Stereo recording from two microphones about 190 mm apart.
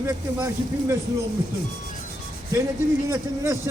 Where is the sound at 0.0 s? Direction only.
15° right (ahead or behind).